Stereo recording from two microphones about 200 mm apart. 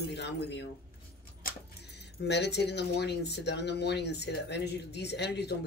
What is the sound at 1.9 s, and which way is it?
Speech, 55° left (ahead or behind).